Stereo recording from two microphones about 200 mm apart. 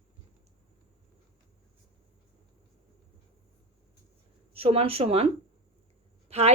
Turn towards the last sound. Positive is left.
turn(degrees=-30)  # may be behind; listen again after turning